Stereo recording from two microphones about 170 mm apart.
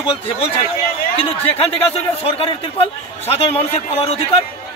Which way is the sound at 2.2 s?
35° left (ahead or behind).